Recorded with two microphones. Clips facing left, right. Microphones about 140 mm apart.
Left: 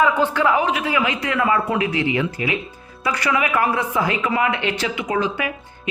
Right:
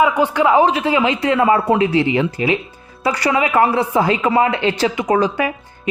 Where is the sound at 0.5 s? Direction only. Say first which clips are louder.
Right 6 dB; 30° right (ahead or behind).